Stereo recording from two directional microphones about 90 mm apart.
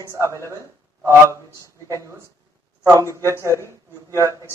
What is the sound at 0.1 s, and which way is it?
A man's voice, 35° right (ahead or behind).